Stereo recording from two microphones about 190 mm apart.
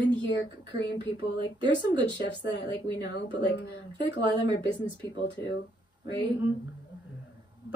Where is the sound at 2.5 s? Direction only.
65° left (ahead or behind).